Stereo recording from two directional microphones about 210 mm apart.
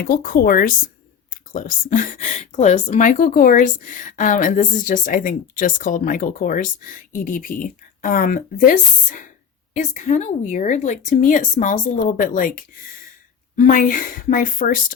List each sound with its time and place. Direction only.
0.0 s speech: 45° left (ahead or behind)
13.6 s speech: 40° left (ahead or behind)